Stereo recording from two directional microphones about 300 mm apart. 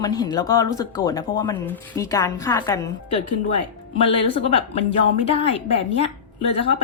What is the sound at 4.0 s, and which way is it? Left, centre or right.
Speech, centre.